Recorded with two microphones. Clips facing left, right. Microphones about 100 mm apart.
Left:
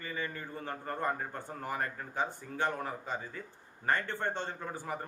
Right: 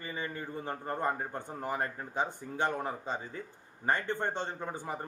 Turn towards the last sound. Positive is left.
turn(degrees=-20)  # may be behind; listen again after turning